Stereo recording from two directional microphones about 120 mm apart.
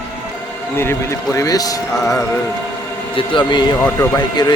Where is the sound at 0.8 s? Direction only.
20° left (ahead or behind).